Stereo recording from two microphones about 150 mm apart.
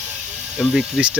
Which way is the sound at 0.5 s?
5° right (ahead or behind).